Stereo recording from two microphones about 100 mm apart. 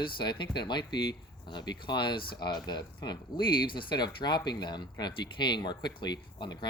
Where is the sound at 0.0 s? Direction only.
50° left (ahead or behind).